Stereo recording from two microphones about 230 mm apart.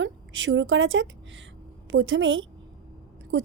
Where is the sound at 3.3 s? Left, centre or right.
Right.